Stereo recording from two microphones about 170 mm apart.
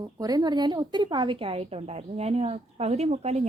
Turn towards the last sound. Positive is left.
turn(degrees=-40)  # may be behind; listen again after turning